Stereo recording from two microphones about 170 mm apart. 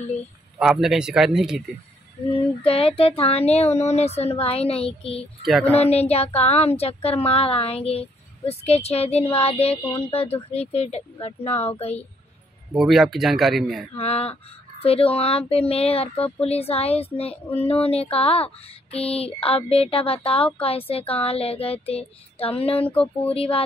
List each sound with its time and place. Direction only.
0.6 s speech: centre (ahead or behind)
2.6 s speech: 35° left (ahead or behind)
5.4 s speech: centre (ahead or behind)
5.7 s speech: 35° left (ahead or behind)
9.8 s speech: 15° left (ahead or behind)
10.0 s speech: 35° left (ahead or behind)
12.7 s speech: centre (ahead or behind)
13.9 s speech: 35° left (ahead or behind)
22.8 s speech: 10° left (ahead or behind)
23.3 s speech: 35° left (ahead or behind)